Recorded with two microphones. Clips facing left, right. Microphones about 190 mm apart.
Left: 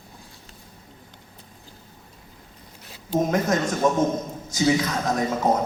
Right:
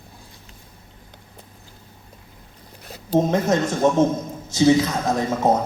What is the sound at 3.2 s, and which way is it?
A man's voice, 25° right (ahead or behind).